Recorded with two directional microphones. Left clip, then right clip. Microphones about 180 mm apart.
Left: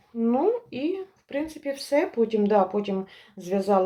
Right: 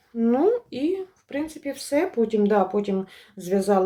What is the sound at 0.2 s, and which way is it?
Speech, 40° right (ahead or behind).